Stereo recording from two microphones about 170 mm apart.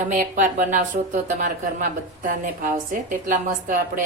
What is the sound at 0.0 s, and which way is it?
Speech, 50° right (ahead or behind).